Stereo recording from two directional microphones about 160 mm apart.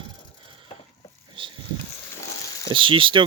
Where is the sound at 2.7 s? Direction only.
30° right (ahead or behind).